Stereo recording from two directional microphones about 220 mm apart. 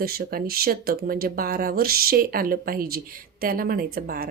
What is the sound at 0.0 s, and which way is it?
Speech, 45° right (ahead or behind).